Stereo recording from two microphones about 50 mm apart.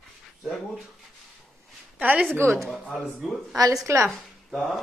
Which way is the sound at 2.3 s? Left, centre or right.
Right.